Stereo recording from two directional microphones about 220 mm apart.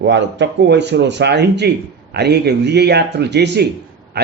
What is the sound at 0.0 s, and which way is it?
A man's voice, 55° right (ahead or behind).